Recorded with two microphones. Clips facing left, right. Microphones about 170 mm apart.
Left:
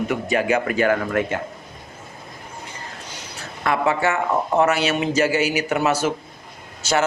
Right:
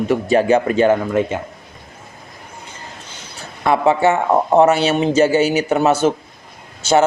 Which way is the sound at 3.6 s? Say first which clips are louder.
Right 6 dB; 25° right (ahead or behind).